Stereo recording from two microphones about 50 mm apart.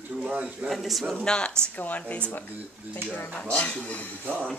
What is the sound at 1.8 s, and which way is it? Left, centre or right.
Speech, left.